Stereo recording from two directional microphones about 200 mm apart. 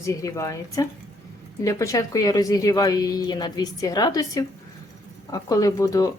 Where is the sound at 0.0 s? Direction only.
15° left (ahead or behind).